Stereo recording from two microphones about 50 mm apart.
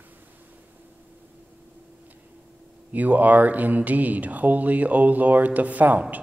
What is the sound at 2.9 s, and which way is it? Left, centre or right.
Speech, right.